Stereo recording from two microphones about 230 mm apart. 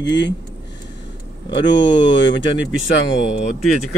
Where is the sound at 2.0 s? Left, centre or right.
Left.